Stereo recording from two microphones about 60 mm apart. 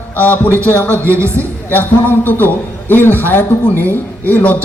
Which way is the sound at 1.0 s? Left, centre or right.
Right.